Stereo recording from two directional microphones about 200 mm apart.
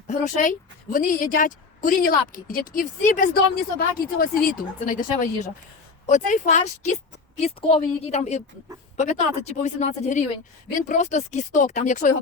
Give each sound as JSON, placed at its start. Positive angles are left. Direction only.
{"t": 0.1, "sound": "a woman's voice", "side_deg": 40}